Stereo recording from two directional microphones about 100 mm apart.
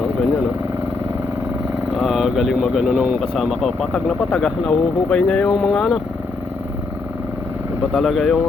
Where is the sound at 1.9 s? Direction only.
5° right (ahead or behind).